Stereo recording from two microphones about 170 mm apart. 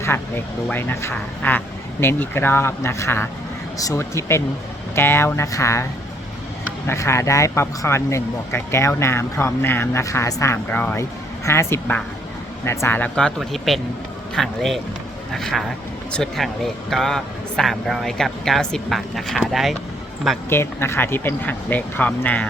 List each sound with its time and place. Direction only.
0.7 s speech: 10° left (ahead or behind)
20.5 s speech: 15° left (ahead or behind)